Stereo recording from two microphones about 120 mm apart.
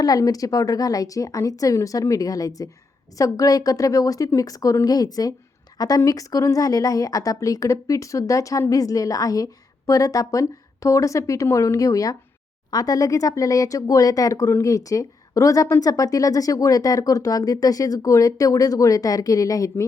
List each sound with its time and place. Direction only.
0.0 s a woman's voice: 30° left (ahead or behind)